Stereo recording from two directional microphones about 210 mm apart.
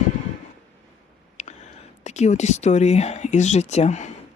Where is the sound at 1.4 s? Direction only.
35° left (ahead or behind).